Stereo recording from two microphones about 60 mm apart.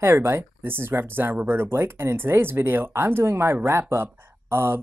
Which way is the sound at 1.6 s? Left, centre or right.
Right.